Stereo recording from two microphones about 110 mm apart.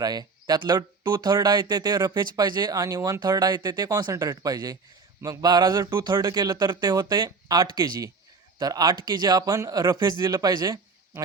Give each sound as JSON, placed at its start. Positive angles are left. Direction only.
{"t": 0.0, "sound": "speech", "side_deg": -35}